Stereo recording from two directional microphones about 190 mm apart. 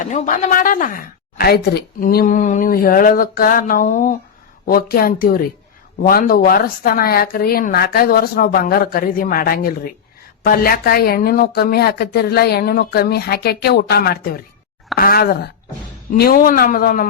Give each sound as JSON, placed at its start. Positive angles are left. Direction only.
{"t": 0.0, "sound": "a woman's voice", "side_deg": 40}